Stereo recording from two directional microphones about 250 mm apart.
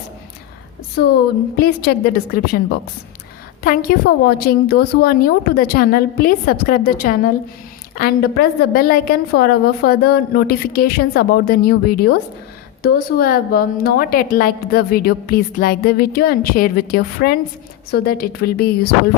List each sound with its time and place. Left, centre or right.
1.5 s a woman's voice: left